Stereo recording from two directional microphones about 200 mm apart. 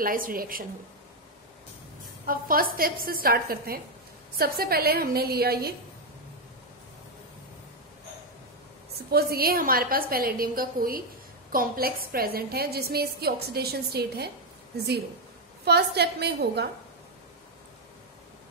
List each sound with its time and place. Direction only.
0.0 s a woman's voice: 45° right (ahead or behind)
2.2 s a woman's voice: 45° right (ahead or behind)
8.9 s a woman's voice: 50° right (ahead or behind)
15.6 s a woman's voice: 55° right (ahead or behind)